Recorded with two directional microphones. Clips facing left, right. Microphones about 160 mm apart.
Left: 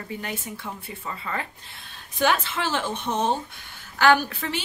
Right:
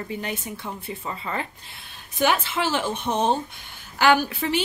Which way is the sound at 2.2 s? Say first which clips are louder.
Right 1 dB; 10° right (ahead or behind).